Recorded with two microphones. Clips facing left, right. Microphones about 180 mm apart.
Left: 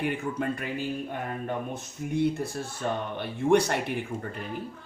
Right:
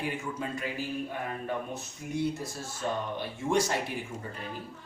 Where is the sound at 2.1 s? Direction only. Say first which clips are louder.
Left 5 dB; 60° left (ahead or behind).